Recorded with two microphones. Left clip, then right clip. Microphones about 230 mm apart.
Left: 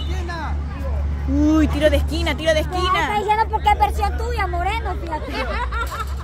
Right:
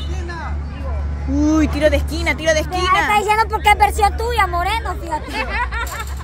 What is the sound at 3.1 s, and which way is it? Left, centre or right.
Speech, right.